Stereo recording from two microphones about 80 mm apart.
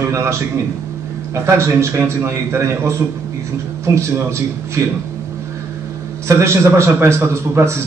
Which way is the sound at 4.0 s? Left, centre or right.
Right.